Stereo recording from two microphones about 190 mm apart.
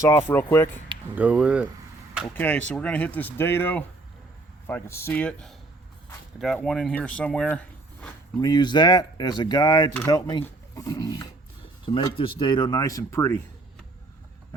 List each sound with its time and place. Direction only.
0.0 s speech: 10° left (ahead or behind)
1.1 s speech: 5° right (ahead or behind)
2.2 s speech: 10° left (ahead or behind)
8.4 s speech: 20° left (ahead or behind)